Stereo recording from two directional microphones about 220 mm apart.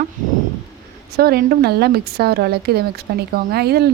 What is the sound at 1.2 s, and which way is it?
Speech, 45° right (ahead or behind).